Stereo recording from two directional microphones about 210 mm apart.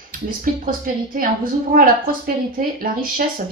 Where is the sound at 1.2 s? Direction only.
40° right (ahead or behind).